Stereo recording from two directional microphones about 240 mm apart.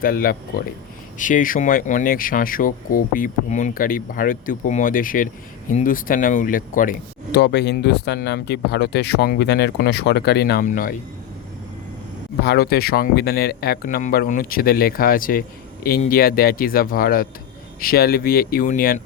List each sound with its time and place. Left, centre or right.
0.0 s speech: left
7.3 s speech: left
12.4 s speech: left